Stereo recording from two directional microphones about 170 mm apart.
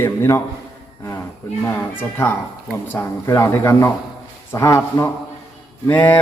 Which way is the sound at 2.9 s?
15° left (ahead or behind).